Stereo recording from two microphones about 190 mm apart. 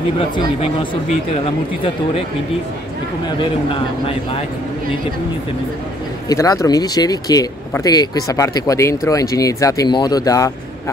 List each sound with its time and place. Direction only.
0.2 s speech: 30° left (ahead or behind)
6.2 s speech: 20° left (ahead or behind)